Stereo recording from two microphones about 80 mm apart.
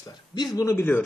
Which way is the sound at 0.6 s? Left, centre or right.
Left.